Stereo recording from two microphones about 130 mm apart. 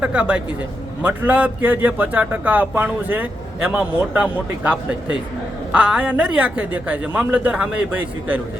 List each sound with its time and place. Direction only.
0.0 s speech: 10° right (ahead or behind)